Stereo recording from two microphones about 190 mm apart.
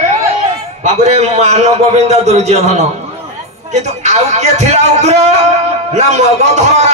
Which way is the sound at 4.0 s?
35° right (ahead or behind).